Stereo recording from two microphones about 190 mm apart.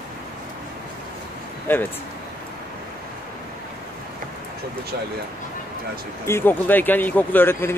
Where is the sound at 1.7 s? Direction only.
10° left (ahead or behind).